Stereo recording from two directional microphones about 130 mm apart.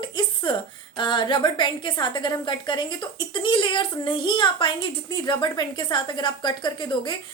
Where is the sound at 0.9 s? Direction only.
40° left (ahead or behind).